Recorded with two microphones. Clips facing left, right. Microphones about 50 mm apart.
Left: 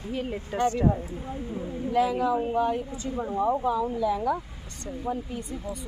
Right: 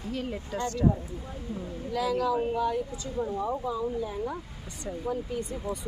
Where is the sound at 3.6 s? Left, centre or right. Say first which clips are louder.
Left 5 dB; left.